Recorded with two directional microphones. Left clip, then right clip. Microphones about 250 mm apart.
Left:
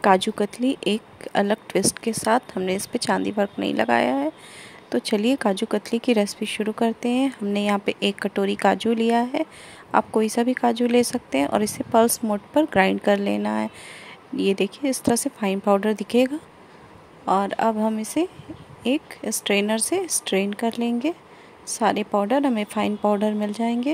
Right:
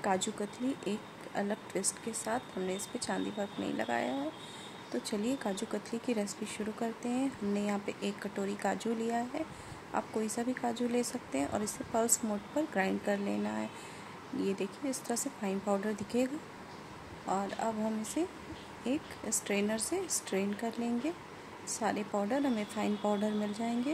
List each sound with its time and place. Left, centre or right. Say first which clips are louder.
0.0 s speech: left 15 dB; left
17.3 s speech: left 14 dB; left